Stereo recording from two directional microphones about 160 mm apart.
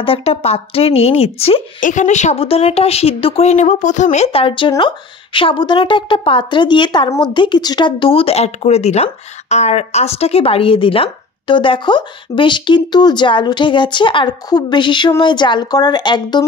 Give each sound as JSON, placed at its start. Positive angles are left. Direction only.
{"t": 0.0, "sound": "speech", "side_deg": 35}
{"t": 1.8, "sound": "speech", "side_deg": 50}